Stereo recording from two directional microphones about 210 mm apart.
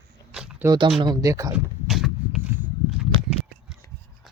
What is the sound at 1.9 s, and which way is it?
Vehicle, centre (ahead or behind).